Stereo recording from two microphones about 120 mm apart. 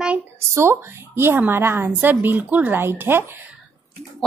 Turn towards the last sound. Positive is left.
turn(degrees=-20)  # may be behind; listen again after turning